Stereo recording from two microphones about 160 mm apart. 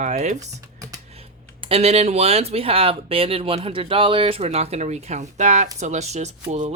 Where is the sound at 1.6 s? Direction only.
35° right (ahead or behind).